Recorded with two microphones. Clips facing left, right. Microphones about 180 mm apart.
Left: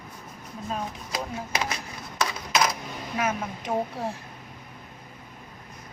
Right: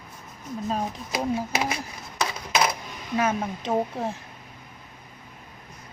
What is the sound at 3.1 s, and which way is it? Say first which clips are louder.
Speech: right 4 dB; 25° right (ahead or behind).